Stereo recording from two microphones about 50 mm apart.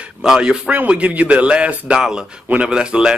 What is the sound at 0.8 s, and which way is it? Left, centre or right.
Speech, right.